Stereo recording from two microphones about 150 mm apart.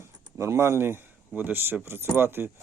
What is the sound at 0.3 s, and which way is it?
Speech, 20° right (ahead or behind).